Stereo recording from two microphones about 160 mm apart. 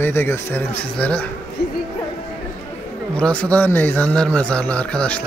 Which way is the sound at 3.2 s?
10° left (ahead or behind).